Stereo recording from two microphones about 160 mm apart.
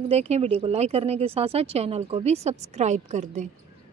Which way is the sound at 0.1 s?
40° right (ahead or behind).